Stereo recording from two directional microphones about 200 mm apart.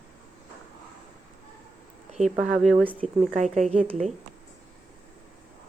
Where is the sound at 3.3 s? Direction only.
35° right (ahead or behind).